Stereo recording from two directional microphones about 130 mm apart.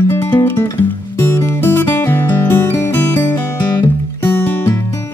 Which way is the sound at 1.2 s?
20° left (ahead or behind).